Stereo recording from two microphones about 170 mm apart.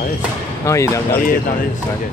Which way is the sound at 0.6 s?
15° left (ahead or behind).